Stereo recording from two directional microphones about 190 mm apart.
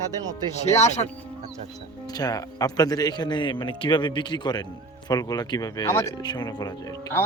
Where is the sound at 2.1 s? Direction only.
20° left (ahead or behind).